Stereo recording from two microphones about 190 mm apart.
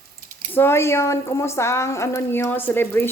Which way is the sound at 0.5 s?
10° left (ahead or behind).